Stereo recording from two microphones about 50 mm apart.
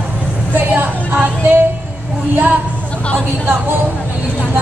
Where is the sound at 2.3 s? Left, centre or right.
Right.